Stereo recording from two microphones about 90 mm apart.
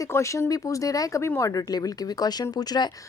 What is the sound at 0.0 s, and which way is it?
Speech, 35° left (ahead or behind).